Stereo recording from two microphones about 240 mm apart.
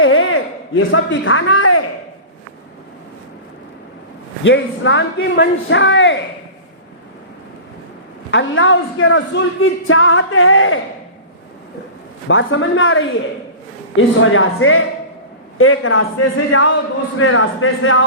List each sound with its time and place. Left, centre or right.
0.0 s a sound: left
4.4 s speech: left
8.3 s a man's voice: left
12.3 s a man's voice: left